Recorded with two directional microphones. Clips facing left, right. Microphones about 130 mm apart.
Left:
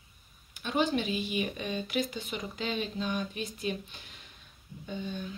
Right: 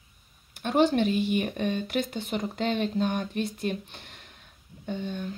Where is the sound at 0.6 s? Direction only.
60° right (ahead or behind).